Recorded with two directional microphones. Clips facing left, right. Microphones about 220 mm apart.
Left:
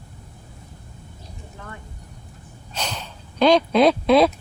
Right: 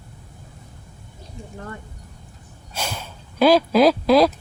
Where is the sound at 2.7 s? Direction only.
10° right (ahead or behind).